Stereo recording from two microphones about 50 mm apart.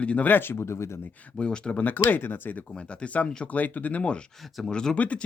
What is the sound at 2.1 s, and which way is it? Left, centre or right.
Speech, left.